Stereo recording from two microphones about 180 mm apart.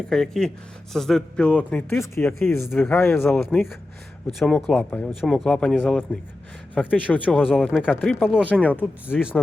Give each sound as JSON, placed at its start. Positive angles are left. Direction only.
{"t": 0.1, "sound": "speech", "side_deg": 5}
{"t": 8.7, "sound": "speech", "side_deg": -10}